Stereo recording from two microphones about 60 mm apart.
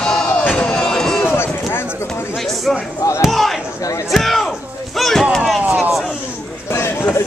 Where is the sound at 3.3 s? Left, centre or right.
Centre.